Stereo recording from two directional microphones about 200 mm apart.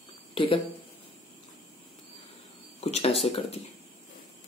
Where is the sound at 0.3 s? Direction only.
25° left (ahead or behind).